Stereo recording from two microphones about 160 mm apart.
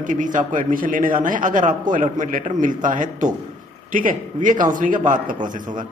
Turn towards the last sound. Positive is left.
turn(degrees=-55)  # may be behind; listen again after turning